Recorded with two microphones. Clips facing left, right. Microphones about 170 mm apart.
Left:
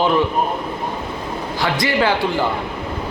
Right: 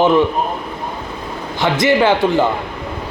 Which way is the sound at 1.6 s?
20° right (ahead or behind).